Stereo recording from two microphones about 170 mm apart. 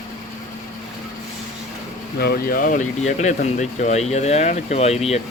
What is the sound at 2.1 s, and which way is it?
Speech, 65° left (ahead or behind).